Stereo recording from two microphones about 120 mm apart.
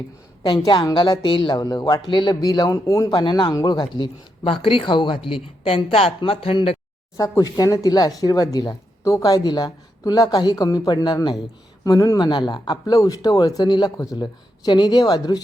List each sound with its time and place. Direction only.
0.6 s a man's voice: 30° left (ahead or behind)
3.2 s speech: 40° left (ahead or behind)
7.2 s speech: 30° left (ahead or behind)